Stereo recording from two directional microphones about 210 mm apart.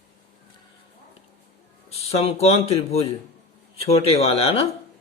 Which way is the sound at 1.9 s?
30° left (ahead or behind).